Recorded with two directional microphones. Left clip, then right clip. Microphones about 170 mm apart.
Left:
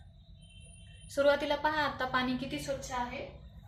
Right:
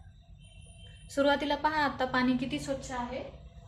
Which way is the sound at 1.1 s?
25° right (ahead or behind).